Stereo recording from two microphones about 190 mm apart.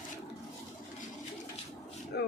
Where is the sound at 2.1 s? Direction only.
65° left (ahead or behind).